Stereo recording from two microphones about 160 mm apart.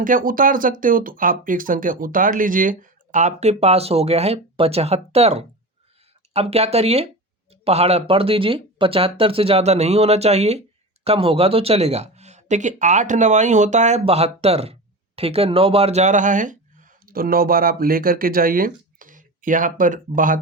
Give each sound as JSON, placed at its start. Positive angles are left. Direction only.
{"t": 0.0, "sound": "speech", "side_deg": -60}